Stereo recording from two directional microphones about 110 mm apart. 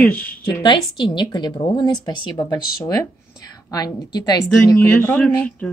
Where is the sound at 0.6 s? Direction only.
45° left (ahead or behind).